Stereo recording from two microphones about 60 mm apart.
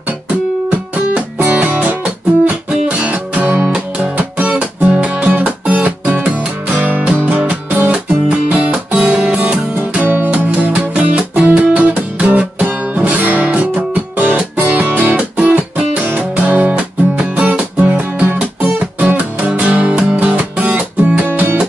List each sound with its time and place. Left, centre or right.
0.7 s music: right
3.6 s music: centre
4.2 s music: right
10.5 s music: centre